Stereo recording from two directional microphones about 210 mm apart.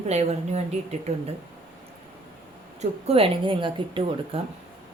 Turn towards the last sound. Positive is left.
turn(degrees=-25)  # may be behind; listen again after turning